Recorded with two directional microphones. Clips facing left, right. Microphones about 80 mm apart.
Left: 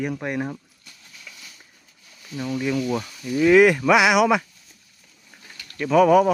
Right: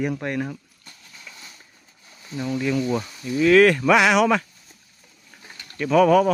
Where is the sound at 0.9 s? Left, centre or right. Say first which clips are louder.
Right 2 dB; right.